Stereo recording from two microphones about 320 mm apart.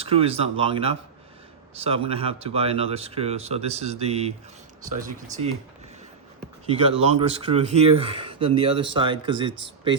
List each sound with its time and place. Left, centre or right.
0.0 s speech: centre
7.0 s speech: centre